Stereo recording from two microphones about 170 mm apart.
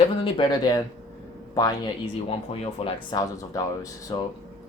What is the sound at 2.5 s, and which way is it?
Speech, 35° left (ahead or behind).